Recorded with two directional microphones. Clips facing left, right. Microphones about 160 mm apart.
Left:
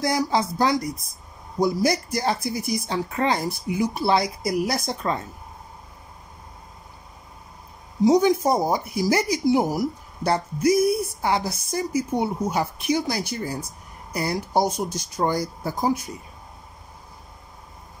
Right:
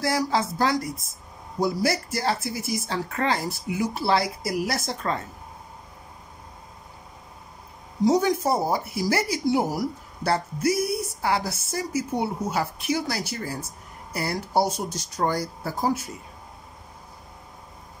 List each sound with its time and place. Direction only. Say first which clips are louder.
0.0 s speech: left 2 dB; 15° left (ahead or behind)
8.0 s speech: left 3 dB; 15° left (ahead or behind)